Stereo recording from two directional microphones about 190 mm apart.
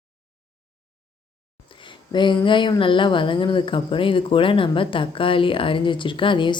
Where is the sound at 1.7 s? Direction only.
25° left (ahead or behind).